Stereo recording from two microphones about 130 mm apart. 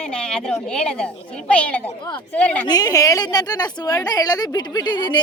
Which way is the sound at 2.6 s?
30° left (ahead or behind).